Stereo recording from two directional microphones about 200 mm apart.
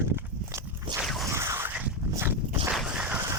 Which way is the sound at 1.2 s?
15° right (ahead or behind).